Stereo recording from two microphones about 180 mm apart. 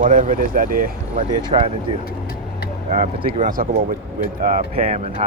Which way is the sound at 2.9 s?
35° right (ahead or behind).